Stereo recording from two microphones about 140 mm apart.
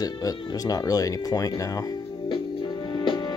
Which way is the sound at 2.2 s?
35° left (ahead or behind).